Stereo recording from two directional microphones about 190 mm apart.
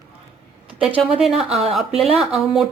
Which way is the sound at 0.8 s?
5° right (ahead or behind).